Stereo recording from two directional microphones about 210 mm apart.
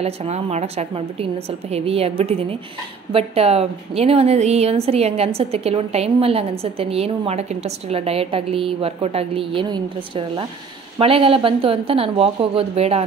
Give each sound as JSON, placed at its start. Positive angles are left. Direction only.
{"t": 0.0, "sound": "a woman's voice", "side_deg": -30}